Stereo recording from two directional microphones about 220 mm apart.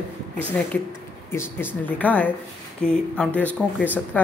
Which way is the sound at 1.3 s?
10° left (ahead or behind).